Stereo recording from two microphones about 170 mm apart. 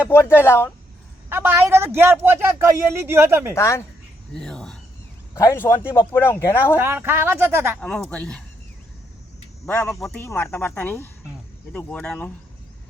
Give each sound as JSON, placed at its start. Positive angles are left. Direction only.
{"t": 0.1, "sound": "a woman's voice", "side_deg": 15}
{"t": 1.3, "sound": "a man's voice", "side_deg": -15}
{"t": 3.5, "sound": "a woman's voice", "side_deg": 15}
{"t": 4.4, "sound": "speech", "side_deg": 5}
{"t": 5.3, "sound": "a woman's voice", "side_deg": 15}
{"t": 6.7, "sound": "a man's voice", "side_deg": -15}
{"t": 7.8, "sound": "speech", "side_deg": 5}
{"t": 9.6, "sound": "a woman's voice", "side_deg": 10}
{"t": 10.2, "sound": "a woman's voice", "side_deg": 15}